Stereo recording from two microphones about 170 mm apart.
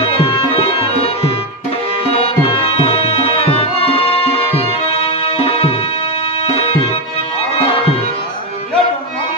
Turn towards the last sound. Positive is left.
turn(degrees=35)  # may be behind; listen again after turning